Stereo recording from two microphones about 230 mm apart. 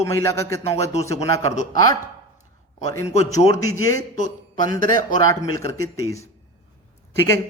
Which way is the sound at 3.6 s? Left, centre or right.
Centre.